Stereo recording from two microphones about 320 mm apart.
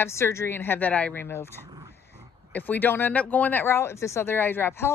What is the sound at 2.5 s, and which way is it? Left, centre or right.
Speech, centre.